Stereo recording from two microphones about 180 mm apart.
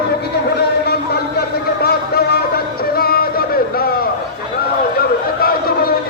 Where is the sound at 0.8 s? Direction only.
60° left (ahead or behind).